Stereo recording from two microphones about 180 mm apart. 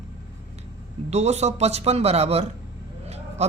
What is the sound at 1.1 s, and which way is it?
Speech, 40° right (ahead or behind).